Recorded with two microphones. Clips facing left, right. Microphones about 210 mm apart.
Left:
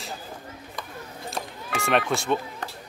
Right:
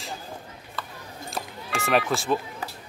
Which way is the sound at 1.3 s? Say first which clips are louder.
Even; centre (ahead or behind).